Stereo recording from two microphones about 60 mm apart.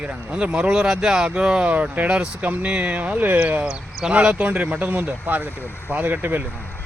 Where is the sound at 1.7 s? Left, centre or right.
Right.